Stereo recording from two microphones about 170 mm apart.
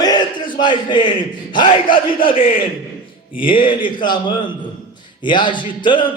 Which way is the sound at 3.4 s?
30° left (ahead or behind).